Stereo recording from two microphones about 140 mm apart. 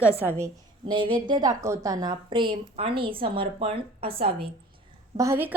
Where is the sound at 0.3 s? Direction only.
20° right (ahead or behind).